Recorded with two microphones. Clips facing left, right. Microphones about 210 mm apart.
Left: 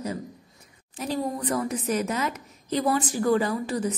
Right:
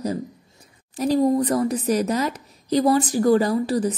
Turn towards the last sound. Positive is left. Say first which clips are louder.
# right 6 dB
turn(degrees=-35)  # may be behind; listen again after turning